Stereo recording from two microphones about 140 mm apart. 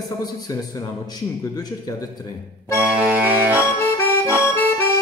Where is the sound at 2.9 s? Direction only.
5° right (ahead or behind).